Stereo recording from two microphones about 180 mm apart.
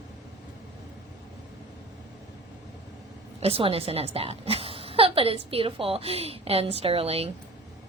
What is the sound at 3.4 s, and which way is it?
A woman's voice, 30° right (ahead or behind).